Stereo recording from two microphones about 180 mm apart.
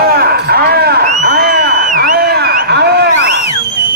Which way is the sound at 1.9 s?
55° right (ahead or behind).